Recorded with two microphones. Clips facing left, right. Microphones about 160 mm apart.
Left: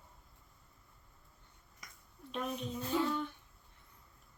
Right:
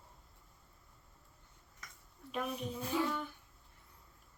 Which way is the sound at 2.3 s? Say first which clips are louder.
Even; 5° right (ahead or behind).